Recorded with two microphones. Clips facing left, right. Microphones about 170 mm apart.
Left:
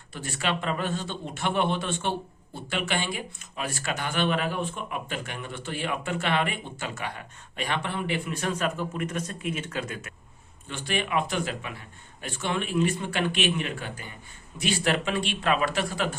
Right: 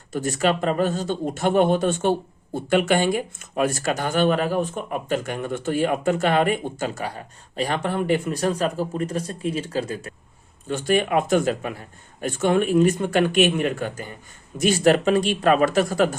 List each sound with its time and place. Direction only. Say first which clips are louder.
0.1 s a man's voice: right 9 dB; 40° right (ahead or behind)